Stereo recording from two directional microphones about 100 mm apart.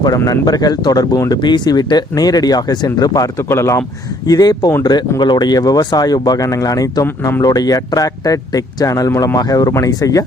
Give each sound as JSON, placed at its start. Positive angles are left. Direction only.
{"t": 0.3, "sound": "speech", "side_deg": 40}
{"t": 3.5, "sound": "a man's voice", "side_deg": 25}
{"t": 4.3, "sound": "speech", "side_deg": 40}
{"t": 7.4, "sound": "speech", "side_deg": 40}